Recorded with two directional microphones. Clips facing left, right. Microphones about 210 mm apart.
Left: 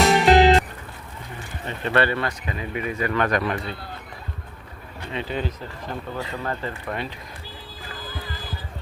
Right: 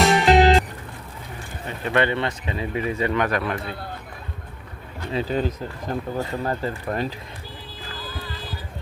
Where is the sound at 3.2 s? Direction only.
5° right (ahead or behind).